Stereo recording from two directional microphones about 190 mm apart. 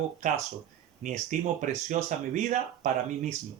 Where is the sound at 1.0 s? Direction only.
40° right (ahead or behind).